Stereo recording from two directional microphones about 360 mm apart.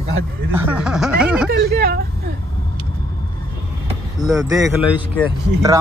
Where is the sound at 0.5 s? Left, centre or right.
Centre.